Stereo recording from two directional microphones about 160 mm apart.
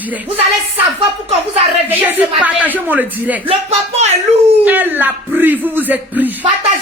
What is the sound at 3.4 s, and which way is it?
Speech, 40° right (ahead or behind).